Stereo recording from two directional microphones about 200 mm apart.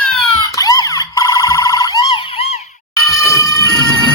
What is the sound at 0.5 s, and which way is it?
Emergency vehicle, 15° left (ahead or behind).